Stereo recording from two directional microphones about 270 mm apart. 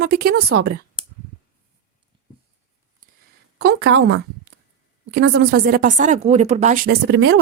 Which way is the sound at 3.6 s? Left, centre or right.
Right.